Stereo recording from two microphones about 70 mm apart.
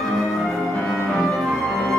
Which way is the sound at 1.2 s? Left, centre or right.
Centre.